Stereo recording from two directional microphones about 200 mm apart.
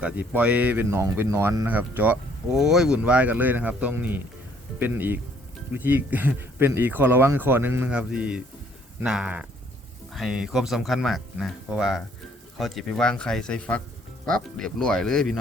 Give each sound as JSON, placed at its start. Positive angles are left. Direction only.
{"t": 0.0, "sound": "speech", "side_deg": -5}